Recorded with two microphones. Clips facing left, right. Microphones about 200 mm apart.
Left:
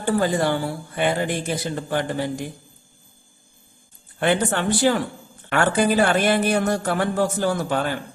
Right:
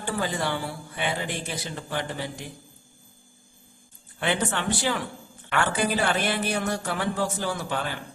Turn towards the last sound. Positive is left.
turn(degrees=45)  # may be behind; listen again after turning